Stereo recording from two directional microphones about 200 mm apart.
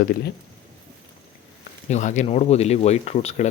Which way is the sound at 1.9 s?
35° left (ahead or behind).